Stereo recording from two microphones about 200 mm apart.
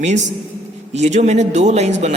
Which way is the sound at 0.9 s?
35° right (ahead or behind).